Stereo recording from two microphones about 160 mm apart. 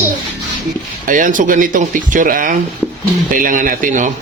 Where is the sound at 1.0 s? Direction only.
55° right (ahead or behind).